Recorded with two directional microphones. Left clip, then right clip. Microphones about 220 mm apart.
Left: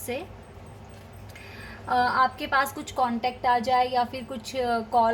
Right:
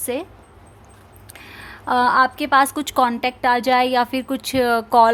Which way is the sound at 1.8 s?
50° right (ahead or behind).